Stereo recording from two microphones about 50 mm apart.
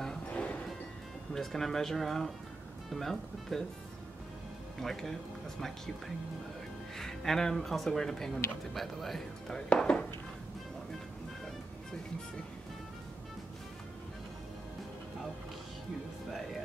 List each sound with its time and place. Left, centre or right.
0.3 s music: left
1.3 s speech: centre
4.7 s speech: centre
7.0 s speech: centre
9.8 s speech: centre